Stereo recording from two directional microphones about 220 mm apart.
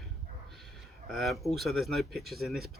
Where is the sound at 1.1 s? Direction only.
Centre (ahead or behind).